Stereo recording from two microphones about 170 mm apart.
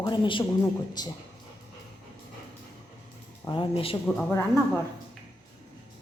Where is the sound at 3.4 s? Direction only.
30° left (ahead or behind).